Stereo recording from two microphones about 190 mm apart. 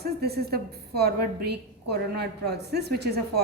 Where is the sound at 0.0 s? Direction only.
55° right (ahead or behind).